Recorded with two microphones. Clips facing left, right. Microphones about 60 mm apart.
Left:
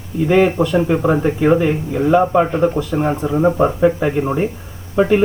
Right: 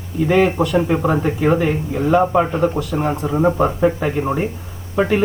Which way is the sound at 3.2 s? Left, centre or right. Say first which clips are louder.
Left 1 dB; centre.